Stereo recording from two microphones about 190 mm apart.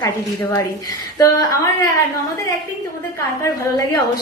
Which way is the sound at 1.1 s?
15° left (ahead or behind).